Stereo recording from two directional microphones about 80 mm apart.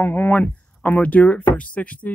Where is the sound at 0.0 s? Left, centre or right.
Left.